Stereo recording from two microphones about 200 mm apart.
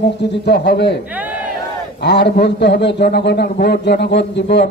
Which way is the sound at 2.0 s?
55° left (ahead or behind).